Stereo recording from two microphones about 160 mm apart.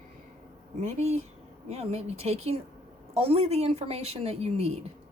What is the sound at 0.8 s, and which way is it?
Speech, 45° right (ahead or behind).